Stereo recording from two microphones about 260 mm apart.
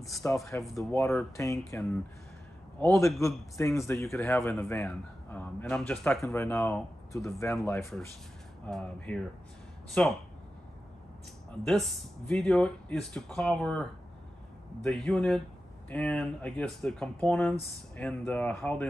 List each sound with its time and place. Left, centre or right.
0.0 s a man's voice: centre
11.6 s speech: centre